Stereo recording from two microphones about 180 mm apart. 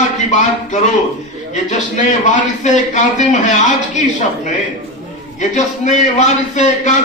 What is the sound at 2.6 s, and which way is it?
Speech, 40° left (ahead or behind).